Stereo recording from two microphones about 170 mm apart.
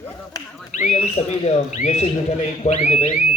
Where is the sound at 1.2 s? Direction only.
40° left (ahead or behind).